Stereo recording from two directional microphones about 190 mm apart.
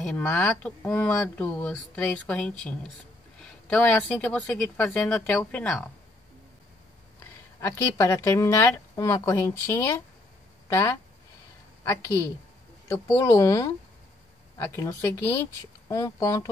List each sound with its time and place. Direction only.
0.0 s speech: 5° left (ahead or behind)
7.6 s speech: 15° left (ahead or behind)
12.8 s speech: 15° left (ahead or behind)